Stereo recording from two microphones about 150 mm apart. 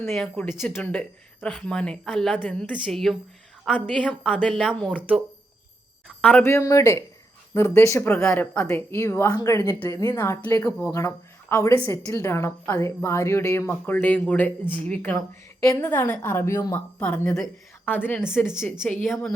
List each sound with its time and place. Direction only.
0.3 s a woman's voice: 15° left (ahead or behind); by 3.9 s 5° right (ahead or behind)
3.9 s a woman's voice: 5° left (ahead or behind)
4.9 s speech: 5° right (ahead or behind)
6.1 s a woman's voice: 10° left (ahead or behind)
17.0 s a woman's voice: 10° left (ahead or behind)
19.0 s speech: centre (ahead or behind)